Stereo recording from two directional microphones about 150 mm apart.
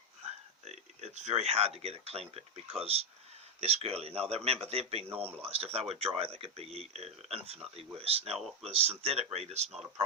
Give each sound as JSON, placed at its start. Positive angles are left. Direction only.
{"t": 0.6, "sound": "speech", "side_deg": -50}
{"t": 5.0, "sound": "speech", "side_deg": -10}
{"t": 5.4, "sound": "speech", "side_deg": -45}